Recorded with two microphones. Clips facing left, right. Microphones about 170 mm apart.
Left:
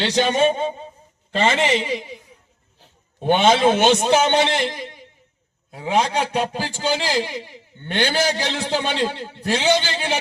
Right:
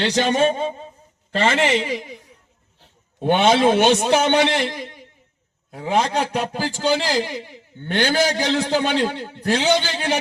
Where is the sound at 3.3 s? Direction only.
Centre (ahead or behind).